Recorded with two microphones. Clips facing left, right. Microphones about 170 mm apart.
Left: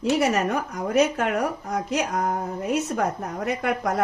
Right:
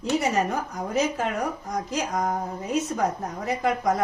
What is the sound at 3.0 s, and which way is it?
A woman's voice, 65° left (ahead or behind).